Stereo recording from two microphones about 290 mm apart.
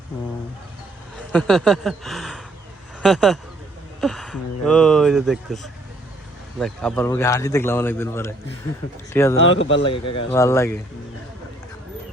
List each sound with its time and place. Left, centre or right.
1.3 s a man's voice: centre
9.4 s speech: left
9.8 s a man's voice: centre